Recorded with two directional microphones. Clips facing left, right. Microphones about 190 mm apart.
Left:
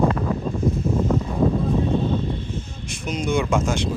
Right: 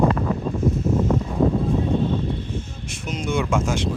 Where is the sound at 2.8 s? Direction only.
5° right (ahead or behind).